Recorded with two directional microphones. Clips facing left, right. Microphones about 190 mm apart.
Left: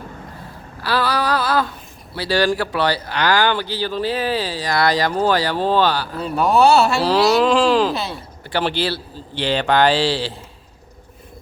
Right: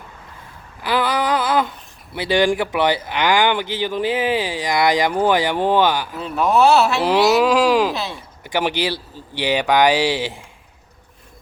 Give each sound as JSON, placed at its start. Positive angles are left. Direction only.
{"t": 0.8, "sound": "a sound", "side_deg": -20}
{"t": 2.1, "sound": "speech", "side_deg": -20}
{"t": 6.1, "sound": "speech", "side_deg": 0}
{"t": 8.5, "sound": "speech", "side_deg": -15}